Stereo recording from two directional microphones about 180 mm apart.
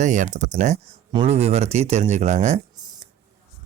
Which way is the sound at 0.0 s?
45° right (ahead or behind).